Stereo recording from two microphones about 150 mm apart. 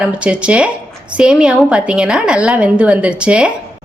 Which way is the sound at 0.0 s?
5° right (ahead or behind).